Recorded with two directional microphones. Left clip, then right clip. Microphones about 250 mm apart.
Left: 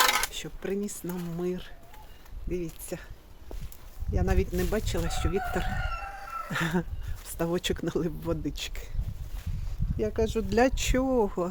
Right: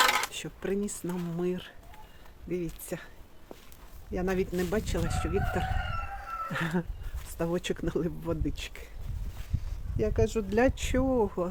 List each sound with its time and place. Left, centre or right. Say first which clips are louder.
0.0 s dishes: left 1 dB; centre
2.5 s speech: even; centre
4.1 s speech: even; centre
10.0 s speech: even; centre